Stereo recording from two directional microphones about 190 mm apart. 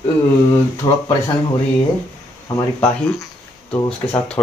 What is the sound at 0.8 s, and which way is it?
Speech, 30° left (ahead or behind).